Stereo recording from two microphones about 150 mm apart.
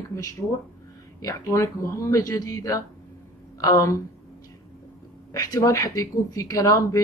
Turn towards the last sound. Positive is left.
turn(degrees=25)  # may be behind; listen again after turning